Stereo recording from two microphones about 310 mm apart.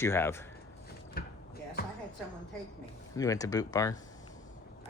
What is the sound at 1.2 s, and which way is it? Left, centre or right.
Basketball bounce, left.